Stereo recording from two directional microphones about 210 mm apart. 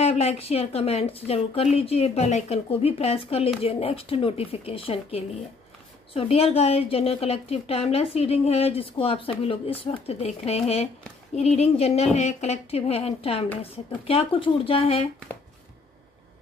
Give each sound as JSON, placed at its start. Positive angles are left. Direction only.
{"t": 0.0, "sound": "a woman's voice", "side_deg": 30}